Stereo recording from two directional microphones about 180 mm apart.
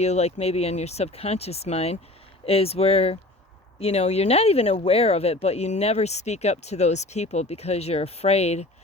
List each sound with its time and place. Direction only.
0.0 s speech: 35° left (ahead or behind)